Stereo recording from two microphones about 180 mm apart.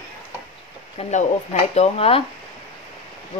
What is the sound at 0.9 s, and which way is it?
Speech, 40° left (ahead or behind).